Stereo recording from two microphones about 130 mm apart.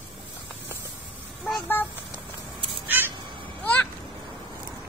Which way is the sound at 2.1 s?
40° right (ahead or behind).